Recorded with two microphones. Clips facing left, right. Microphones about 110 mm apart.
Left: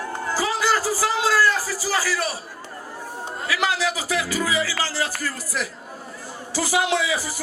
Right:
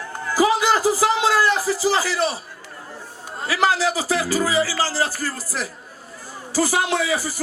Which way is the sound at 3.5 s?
35° right (ahead or behind).